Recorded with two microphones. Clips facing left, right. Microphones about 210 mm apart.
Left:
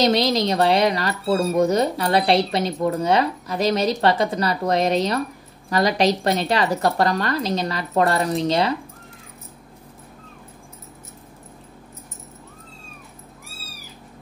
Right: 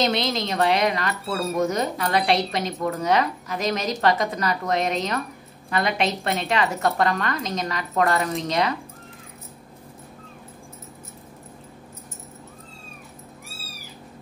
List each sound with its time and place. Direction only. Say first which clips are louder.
0.0 s speech: left 5 dB; 35° left (ahead or behind)